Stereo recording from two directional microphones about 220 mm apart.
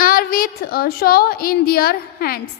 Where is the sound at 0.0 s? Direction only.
40° left (ahead or behind).